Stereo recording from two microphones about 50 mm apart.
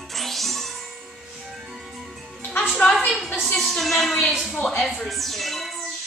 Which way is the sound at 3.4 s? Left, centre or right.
Centre.